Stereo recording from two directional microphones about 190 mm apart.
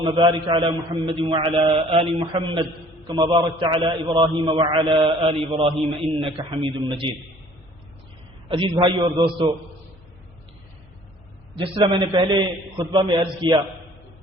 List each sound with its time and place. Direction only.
0.0 s a man's voice: 25° right (ahead or behind)
8.4 s a man's voice: 25° right (ahead or behind)
11.5 s a man's voice: 30° right (ahead or behind)